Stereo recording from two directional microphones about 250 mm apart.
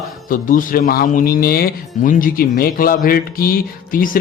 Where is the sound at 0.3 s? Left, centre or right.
Left.